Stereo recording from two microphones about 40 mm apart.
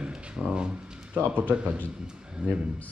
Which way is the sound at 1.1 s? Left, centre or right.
Right.